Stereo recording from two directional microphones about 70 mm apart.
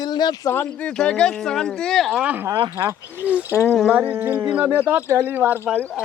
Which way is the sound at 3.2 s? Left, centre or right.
Centre.